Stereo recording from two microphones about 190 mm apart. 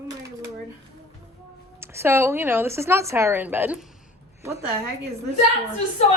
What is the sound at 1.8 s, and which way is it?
Speech, 15° right (ahead or behind).